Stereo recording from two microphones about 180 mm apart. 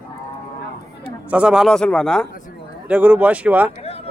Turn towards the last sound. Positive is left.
turn(degrees=-10)  # may be behind; listen again after turning